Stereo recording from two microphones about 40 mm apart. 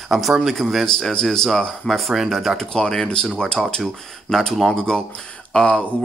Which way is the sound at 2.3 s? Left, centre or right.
Centre.